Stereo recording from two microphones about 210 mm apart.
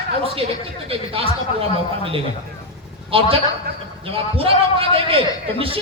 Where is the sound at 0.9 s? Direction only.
25° right (ahead or behind).